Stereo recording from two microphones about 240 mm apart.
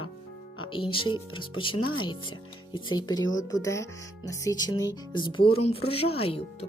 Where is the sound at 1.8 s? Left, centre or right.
Left.